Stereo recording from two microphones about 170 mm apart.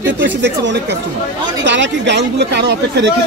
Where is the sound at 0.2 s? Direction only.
90° right.